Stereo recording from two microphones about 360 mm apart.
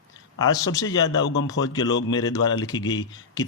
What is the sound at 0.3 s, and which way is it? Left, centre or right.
Speech, centre.